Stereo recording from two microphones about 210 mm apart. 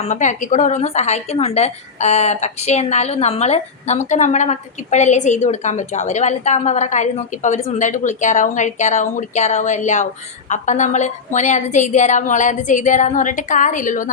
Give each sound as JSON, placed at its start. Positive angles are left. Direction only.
{"t": 0.0, "sound": "a woman's voice", "side_deg": 35}